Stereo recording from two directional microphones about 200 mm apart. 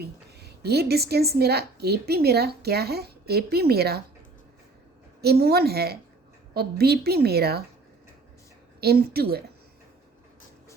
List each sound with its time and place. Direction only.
0.0 s a woman's voice: 55° right (ahead or behind)
5.2 s a woman's voice: 50° right (ahead or behind)
8.8 s a woman's voice: 50° right (ahead or behind)